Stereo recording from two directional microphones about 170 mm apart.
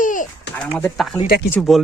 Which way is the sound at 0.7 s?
5° left (ahead or behind).